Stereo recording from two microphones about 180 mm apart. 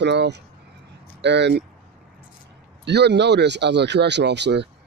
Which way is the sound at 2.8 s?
70° right (ahead or behind).